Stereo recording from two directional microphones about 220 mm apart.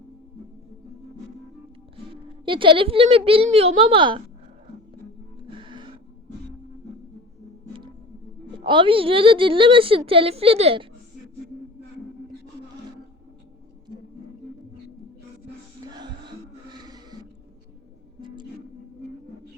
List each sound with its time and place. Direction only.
2.4 s a woman's voice: 20° right (ahead or behind)
5.5 s music: 20° right (ahead or behind)
8.5 s a woman's voice: 20° right (ahead or behind)
15.8 s music: 20° right (ahead or behind)